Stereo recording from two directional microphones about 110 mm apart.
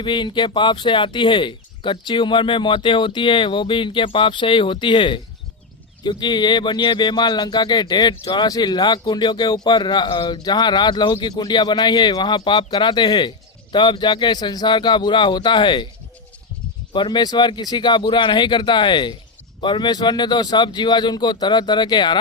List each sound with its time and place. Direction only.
0.0 s speech: 45° left (ahead or behind)
16.9 s speech: 45° left (ahead or behind)